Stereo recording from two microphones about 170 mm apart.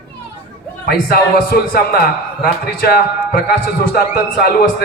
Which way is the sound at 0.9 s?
65° left (ahead or behind).